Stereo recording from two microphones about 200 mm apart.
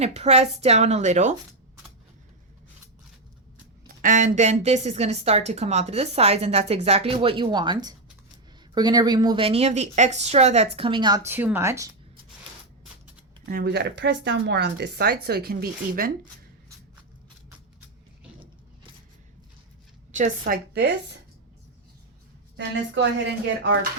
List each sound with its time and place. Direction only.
0.0 s a woman's voice: 30° right (ahead or behind)
3.8 s a woman's voice: 40° right (ahead or behind); by 11.9 s 15° right (ahead or behind)
13.4 s speech: 45° right (ahead or behind)
20.1 s a woman's voice: 40° right (ahead or behind); by 21.2 s 60° right (ahead or behind)
22.5 s speech: 60° right (ahead or behind)